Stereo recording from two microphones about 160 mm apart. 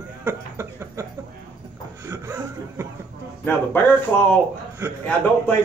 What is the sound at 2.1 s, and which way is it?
Speech, 15° right (ahead or behind).